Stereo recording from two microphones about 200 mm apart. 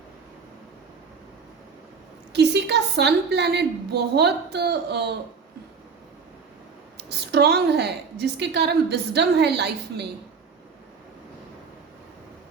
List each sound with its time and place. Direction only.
2.3 s a woman's voice: 55° right (ahead or behind)
6.9 s a woman's voice: 55° right (ahead or behind)